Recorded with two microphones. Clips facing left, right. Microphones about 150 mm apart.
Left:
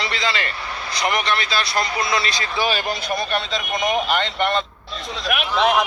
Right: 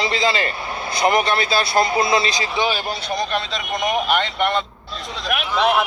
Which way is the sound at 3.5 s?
Centre (ahead or behind).